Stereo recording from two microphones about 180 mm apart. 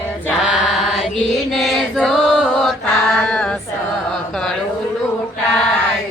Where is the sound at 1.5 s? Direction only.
Centre (ahead or behind).